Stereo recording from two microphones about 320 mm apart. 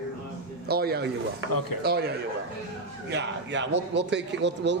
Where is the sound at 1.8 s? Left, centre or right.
Right.